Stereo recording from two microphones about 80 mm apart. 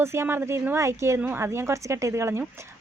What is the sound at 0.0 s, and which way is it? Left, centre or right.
Speech, right.